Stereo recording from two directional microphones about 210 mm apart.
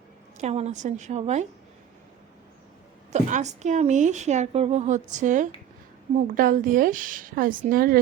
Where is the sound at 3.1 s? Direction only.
35° right (ahead or behind).